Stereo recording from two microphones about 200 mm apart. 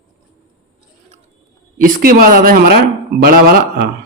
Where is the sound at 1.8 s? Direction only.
45° right (ahead or behind).